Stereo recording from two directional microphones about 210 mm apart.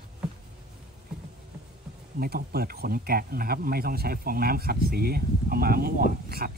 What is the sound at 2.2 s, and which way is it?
Speech, 45° right (ahead or behind).